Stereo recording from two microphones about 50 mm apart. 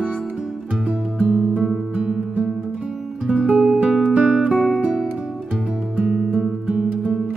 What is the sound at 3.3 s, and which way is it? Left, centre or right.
Music, right.